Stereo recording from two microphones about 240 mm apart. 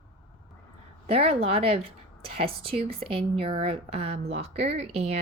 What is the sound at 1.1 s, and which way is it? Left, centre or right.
Speech, right.